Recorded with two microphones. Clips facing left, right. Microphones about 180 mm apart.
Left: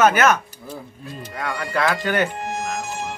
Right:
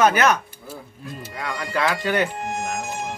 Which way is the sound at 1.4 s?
15° right (ahead or behind).